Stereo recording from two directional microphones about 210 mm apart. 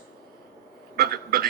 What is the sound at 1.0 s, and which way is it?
Speech, 45° right (ahead or behind).